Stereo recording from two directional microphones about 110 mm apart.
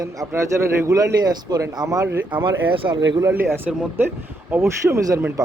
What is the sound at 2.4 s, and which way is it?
Speech, 50° right (ahead or behind).